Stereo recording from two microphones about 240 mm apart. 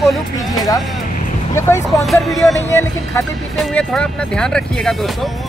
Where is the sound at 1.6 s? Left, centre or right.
Centre.